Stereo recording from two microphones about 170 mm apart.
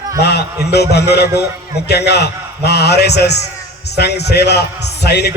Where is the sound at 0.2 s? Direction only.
75° left (ahead or behind).